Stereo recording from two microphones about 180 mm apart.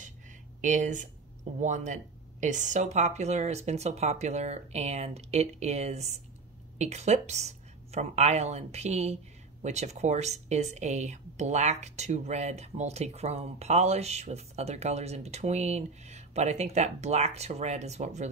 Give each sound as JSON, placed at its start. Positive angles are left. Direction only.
{"t": 0.6, "sound": "a woman's voice", "side_deg": -45}